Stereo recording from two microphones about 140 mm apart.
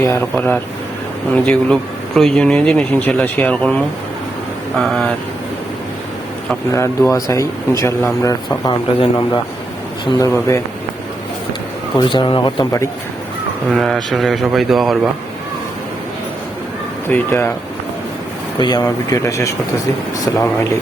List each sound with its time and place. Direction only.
0.3 s speech: 10° left (ahead or behind)
6.7 s speech: 20° left (ahead or behind)
10.2 s speech: 20° left (ahead or behind)
11.9 s speech: 35° left (ahead or behind)
13.7 s speech: centre (ahead or behind)
17.1 s speech: 15° left (ahead or behind)
18.6 s speech: 30° left (ahead or behind)